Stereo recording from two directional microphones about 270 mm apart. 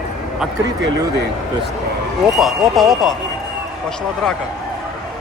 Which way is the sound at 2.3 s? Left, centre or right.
Centre.